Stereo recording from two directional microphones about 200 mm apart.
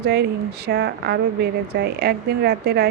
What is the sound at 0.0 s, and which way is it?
Speech, 55° right (ahead or behind).